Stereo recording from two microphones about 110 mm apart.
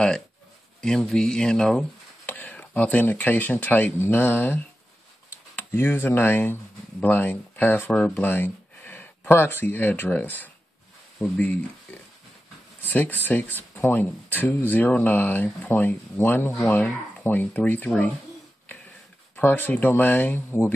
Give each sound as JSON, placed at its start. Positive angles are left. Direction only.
{"t": 0.7, "sound": "speech", "side_deg": 5}
{"t": 5.6, "sound": "speech", "side_deg": 20}
{"t": 19.3, "sound": "speech", "side_deg": 15}